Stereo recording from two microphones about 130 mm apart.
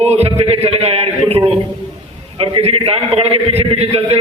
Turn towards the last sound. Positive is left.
turn(degrees=-50)  # may be behind; listen again after turning